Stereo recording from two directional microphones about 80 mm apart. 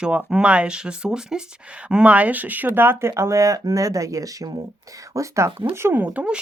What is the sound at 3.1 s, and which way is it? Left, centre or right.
Speech, right.